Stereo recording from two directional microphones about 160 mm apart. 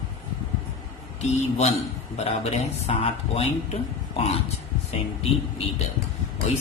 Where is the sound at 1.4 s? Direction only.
45° left (ahead or behind).